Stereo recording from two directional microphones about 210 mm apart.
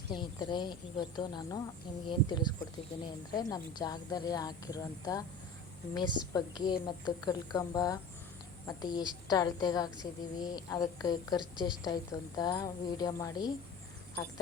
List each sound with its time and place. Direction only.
0.1 s a woman's voice: 20° left (ahead or behind)